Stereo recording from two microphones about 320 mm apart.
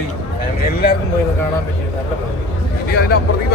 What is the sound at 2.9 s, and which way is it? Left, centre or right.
Speech, left.